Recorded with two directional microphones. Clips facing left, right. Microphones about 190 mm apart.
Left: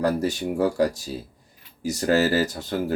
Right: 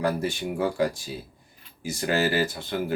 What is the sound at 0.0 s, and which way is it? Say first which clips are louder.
Speech: left 3 dB; 40° left (ahead or behind).